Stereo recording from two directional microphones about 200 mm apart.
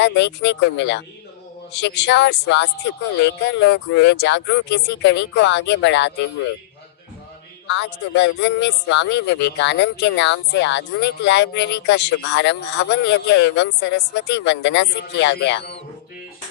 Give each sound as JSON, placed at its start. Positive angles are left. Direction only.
{"t": 0.0, "sound": "speech", "side_deg": 60}
{"t": 7.7, "sound": "speech", "side_deg": 60}